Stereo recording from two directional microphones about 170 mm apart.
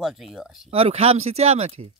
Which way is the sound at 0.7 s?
35° right (ahead or behind).